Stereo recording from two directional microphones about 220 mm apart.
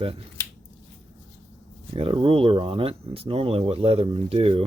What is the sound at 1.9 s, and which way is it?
Speech, 25° right (ahead or behind).